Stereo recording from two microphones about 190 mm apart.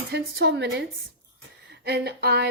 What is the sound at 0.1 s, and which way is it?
A woman's voice, 65° right (ahead or behind).